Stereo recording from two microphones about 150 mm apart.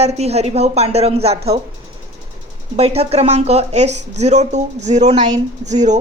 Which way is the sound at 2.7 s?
45° right (ahead or behind).